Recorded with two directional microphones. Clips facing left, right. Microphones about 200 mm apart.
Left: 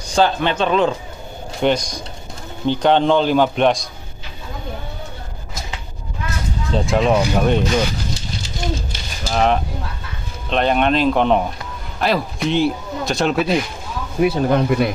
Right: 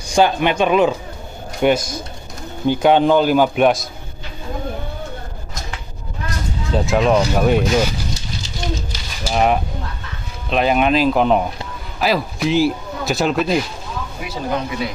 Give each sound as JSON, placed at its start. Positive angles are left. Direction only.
{"t": 0.1, "sound": "a man's voice", "side_deg": -15}
{"t": 6.7, "sound": "speech", "side_deg": 0}
{"t": 9.2, "sound": "a man's voice", "side_deg": -10}
{"t": 14.2, "sound": "speech", "side_deg": 55}